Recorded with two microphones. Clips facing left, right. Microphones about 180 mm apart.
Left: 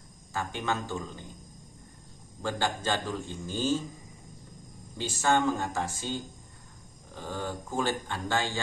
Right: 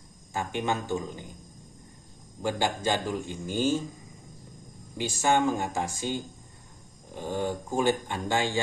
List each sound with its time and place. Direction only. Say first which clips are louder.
0.3 s speech: right 3 dB; 15° right (ahead or behind)
2.4 s speech: right 3 dB; 15° right (ahead or behind)
4.9 s speech: right 2 dB; 15° right (ahead or behind)